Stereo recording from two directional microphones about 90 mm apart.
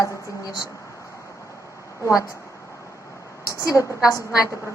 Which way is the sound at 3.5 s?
40° left (ahead or behind).